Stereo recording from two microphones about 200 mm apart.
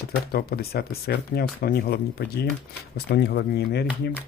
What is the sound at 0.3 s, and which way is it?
Speech, 50° left (ahead or behind).